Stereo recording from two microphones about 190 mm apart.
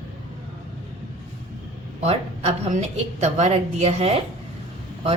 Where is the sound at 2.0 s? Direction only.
35° right (ahead or behind).